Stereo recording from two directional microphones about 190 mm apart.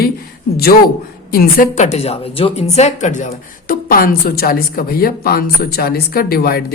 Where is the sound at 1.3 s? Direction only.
40° left (ahead or behind).